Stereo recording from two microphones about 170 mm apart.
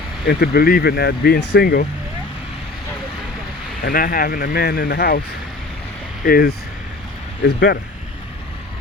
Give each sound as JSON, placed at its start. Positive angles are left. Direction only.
{"t": 0.3, "sound": "speech", "side_deg": 75}
{"t": 3.8, "sound": "speech", "side_deg": 55}
{"t": 6.2, "sound": "speech", "side_deg": 60}